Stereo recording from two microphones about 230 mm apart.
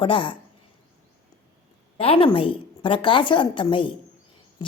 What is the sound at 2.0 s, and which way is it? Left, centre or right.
A woman's voice, left.